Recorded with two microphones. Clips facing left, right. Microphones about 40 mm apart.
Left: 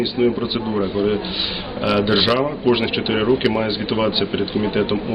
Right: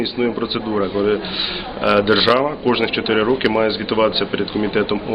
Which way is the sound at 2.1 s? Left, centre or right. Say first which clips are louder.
Right 3 dB; centre.